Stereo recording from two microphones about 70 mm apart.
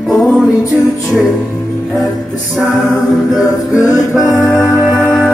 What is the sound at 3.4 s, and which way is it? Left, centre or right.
Music, left.